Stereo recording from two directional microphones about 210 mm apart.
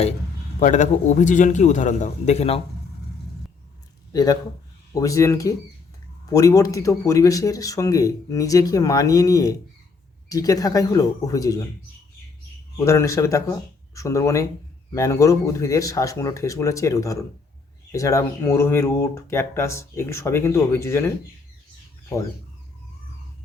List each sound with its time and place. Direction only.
0.6 s a man's voice: 35° left (ahead or behind)
4.1 s speech: 20° left (ahead or behind)
12.7 s speech: 15° left (ahead or behind)